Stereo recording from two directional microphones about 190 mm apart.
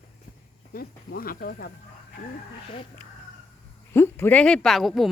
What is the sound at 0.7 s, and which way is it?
Speech, 50° left (ahead or behind).